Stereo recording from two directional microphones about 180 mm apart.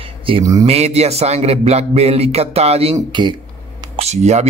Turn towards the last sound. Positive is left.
turn(degrees=-40)  # may be behind; listen again after turning